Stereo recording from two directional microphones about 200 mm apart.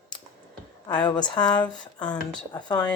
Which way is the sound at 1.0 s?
20° left (ahead or behind).